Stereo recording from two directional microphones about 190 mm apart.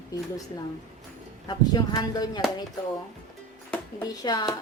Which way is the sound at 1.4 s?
20° left (ahead or behind).